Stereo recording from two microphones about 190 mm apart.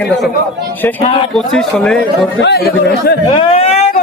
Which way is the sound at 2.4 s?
60° left (ahead or behind).